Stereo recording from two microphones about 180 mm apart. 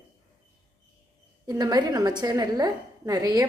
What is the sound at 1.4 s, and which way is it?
A woman's voice, 20° right (ahead or behind).